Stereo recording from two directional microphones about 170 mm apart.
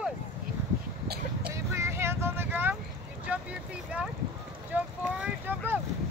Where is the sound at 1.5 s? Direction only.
15° right (ahead or behind).